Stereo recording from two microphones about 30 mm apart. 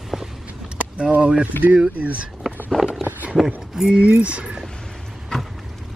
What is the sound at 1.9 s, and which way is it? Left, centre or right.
Speech, right.